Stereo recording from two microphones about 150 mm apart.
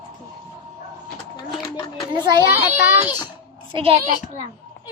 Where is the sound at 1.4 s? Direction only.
25° left (ahead or behind).